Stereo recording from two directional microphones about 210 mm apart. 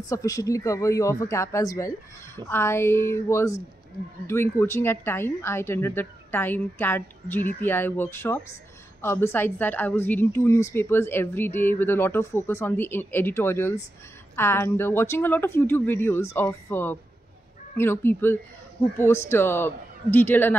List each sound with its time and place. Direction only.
0.0 s a woman's voice: 15° left (ahead or behind)